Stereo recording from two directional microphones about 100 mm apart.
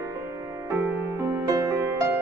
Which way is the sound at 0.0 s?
30° right (ahead or behind).